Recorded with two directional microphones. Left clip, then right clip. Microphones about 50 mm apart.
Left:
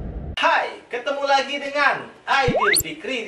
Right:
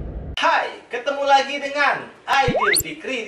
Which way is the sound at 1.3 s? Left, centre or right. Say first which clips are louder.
Right 4 dB; centre.